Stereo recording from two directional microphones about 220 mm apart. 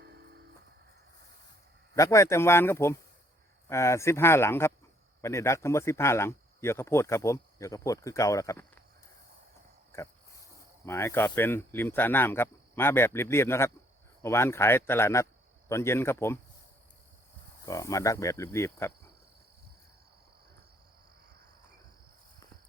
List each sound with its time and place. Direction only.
0.0 s music: 50° right (ahead or behind)
2.0 s speech: 15° left (ahead or behind)
10.8 s speech: 10° left (ahead or behind)
17.7 s speech: 15° left (ahead or behind)